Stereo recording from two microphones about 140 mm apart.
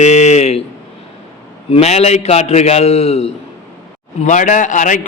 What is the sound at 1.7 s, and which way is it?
A man's voice, 50° left (ahead or behind).